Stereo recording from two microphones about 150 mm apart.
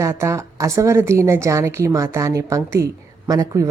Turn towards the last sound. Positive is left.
turn(degrees=-25)  # may be behind; listen again after turning